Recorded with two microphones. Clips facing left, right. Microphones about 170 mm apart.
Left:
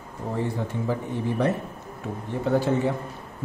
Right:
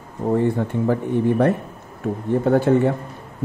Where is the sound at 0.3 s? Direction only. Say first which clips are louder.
Right 9 dB; 55° right (ahead or behind).